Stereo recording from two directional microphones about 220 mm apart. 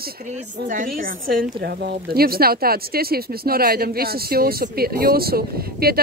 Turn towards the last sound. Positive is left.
turn(degrees=-45)  # may be behind; listen again after turning